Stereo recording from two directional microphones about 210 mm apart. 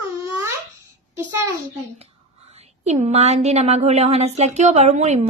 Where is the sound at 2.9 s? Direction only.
30° right (ahead or behind).